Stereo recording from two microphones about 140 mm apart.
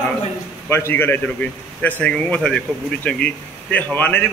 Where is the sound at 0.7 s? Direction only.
15° left (ahead or behind).